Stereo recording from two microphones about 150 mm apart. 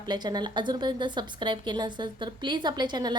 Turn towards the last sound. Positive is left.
turn(degrees=-30)  # may be behind; listen again after turning